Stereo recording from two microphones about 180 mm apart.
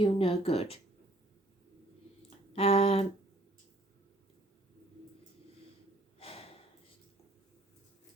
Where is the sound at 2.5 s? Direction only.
35° left (ahead or behind).